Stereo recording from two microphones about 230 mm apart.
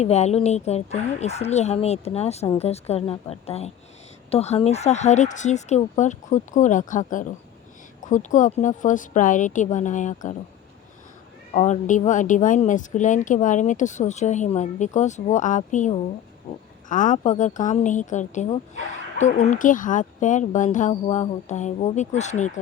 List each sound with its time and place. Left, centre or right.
0.0 s a woman's voice: left
11.5 s a woman's voice: left